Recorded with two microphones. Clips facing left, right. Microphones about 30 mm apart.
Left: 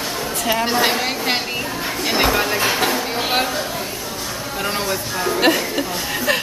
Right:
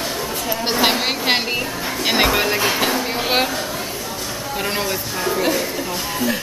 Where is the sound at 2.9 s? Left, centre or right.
Centre.